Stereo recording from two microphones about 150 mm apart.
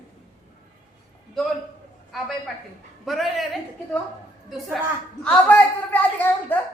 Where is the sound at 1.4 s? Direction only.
Centre (ahead or behind).